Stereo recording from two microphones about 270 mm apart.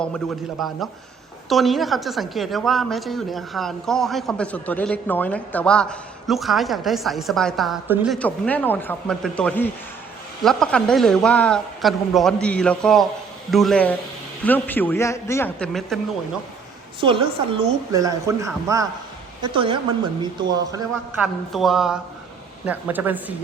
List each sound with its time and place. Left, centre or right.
0.0 s a woman's voice: centre
17.0 s a woman's voice: centre
21.5 s a woman's voice: centre